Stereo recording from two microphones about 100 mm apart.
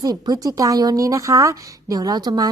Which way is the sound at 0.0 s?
40° right (ahead or behind).